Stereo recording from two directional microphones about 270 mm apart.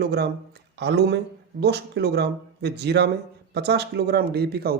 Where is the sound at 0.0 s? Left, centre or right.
Right.